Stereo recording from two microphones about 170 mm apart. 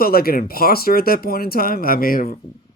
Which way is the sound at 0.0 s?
60° left (ahead or behind).